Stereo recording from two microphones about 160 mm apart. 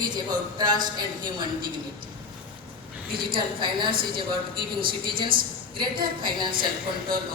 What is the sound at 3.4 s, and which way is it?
A woman's voice, 30° right (ahead or behind).